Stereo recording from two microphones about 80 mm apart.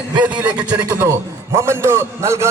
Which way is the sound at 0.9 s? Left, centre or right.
Right.